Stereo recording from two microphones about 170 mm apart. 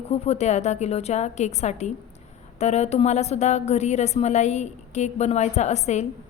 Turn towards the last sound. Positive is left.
turn(degrees=40)  # may be behind; listen again after turning